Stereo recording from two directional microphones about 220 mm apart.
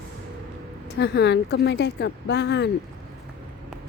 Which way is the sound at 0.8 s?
50° left (ahead or behind).